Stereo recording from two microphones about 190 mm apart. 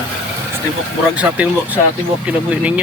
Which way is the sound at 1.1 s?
5° right (ahead or behind).